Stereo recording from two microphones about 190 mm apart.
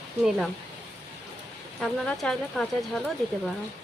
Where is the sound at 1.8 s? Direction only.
5° left (ahead or behind).